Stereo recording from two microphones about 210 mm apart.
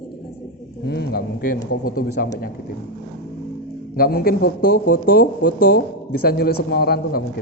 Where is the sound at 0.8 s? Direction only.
50° left (ahead or behind).